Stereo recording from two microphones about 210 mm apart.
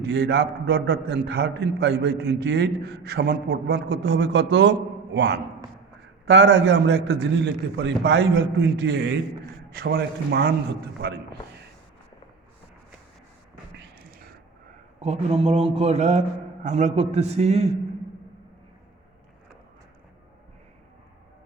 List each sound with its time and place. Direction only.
0.1 s a man's voice: 55° right (ahead or behind)
15.0 s a man's voice: 30° right (ahead or behind)